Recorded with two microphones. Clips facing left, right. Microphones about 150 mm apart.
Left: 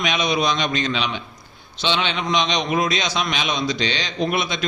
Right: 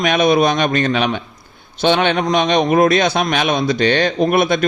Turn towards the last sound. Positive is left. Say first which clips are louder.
# right 8 dB
turn(degrees=-55)  # may be behind; listen again after turning